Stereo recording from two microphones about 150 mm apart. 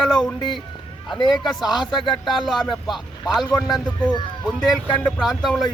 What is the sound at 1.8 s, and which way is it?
Speech, 30° left (ahead or behind).